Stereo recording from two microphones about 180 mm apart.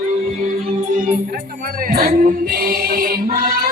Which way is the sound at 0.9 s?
45° right (ahead or behind).